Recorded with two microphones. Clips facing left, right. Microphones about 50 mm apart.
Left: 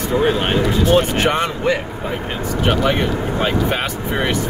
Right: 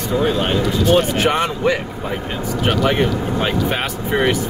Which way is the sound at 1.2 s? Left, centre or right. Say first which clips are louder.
Right 1 dB; centre.